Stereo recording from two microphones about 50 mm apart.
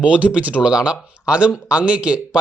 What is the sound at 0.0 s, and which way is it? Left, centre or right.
Speech, right.